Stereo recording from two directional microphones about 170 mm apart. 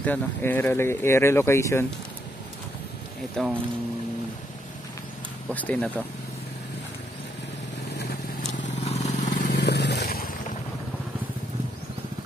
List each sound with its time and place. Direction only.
0.0 s speech: 10° left (ahead or behind)
3.4 s speech: 5° left (ahead or behind)
5.5 s speech: 10° left (ahead or behind)
8.8 s vehicle: 40° left (ahead or behind)
9.5 s a sound: 80° left; by 10.3 s 60° left (ahead or behind)